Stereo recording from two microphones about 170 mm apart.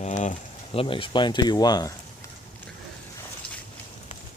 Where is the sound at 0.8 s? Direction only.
30° left (ahead or behind).